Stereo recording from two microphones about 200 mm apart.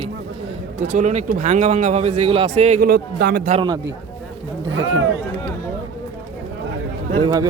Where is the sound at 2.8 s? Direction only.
55° right (ahead or behind).